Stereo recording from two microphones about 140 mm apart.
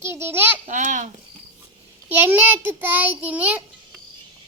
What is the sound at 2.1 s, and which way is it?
A child's voice, 15° right (ahead or behind).